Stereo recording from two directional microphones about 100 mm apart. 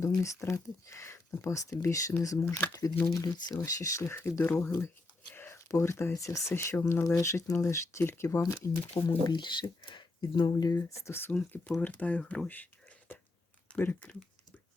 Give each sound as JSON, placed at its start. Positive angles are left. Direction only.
{"t": 0.2, "sound": "speech", "side_deg": 30}
{"t": 9.0, "sound": "speech", "side_deg": 50}
{"t": 13.7, "sound": "speech", "side_deg": 15}